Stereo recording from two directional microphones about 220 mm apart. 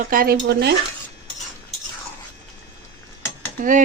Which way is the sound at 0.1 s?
40° right (ahead or behind).